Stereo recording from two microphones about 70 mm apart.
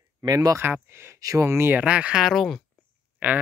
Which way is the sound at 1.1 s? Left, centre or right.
Right.